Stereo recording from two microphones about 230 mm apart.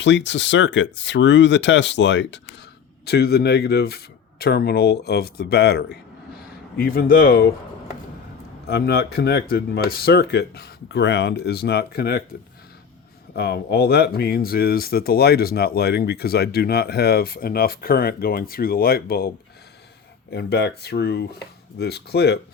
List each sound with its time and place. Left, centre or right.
0.0 s speech: left
8.6 s speech: left
13.3 s speech: left
20.3 s speech: left